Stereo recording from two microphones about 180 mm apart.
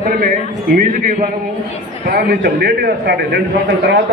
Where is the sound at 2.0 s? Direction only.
60° right (ahead or behind).